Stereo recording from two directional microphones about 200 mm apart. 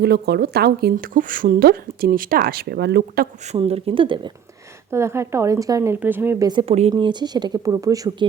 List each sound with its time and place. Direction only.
0.0 s a woman's voice: 55° right (ahead or behind)
3.4 s speech: 30° right (ahead or behind)
4.9 s a woman's voice: 15° right (ahead or behind)
6.5 s speech: 25° right (ahead or behind)